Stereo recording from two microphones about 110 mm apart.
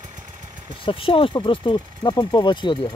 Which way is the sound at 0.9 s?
55° left (ahead or behind).